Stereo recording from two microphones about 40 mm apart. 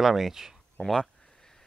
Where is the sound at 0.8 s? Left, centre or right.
Left.